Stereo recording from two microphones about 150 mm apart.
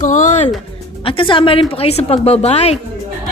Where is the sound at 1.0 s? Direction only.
35° left (ahead or behind).